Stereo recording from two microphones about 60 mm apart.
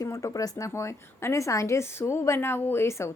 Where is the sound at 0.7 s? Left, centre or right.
Left.